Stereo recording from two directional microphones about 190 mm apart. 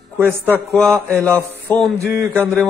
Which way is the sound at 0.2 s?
10° right (ahead or behind).